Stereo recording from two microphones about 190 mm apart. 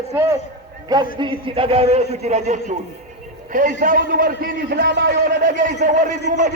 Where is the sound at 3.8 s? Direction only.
45° right (ahead or behind).